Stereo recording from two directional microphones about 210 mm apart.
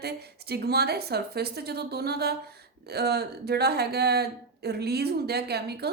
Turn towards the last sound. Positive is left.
turn(degrees=-50)  # may be behind; listen again after turning